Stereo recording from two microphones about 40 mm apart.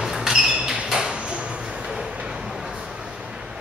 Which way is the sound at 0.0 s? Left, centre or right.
Centre.